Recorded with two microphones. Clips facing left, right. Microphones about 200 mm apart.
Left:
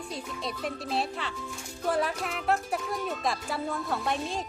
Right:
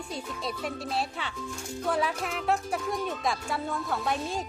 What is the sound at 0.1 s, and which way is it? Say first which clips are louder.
Speech: right 2 dB; centre (ahead or behind).